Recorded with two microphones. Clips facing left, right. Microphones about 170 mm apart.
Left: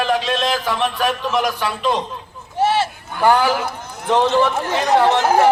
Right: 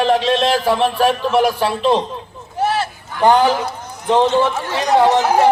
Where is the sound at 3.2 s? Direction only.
20° right (ahead or behind).